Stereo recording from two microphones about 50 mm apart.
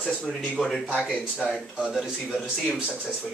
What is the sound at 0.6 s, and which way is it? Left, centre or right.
Speech, centre.